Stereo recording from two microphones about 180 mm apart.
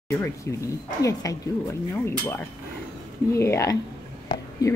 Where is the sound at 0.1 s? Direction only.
10° left (ahead or behind).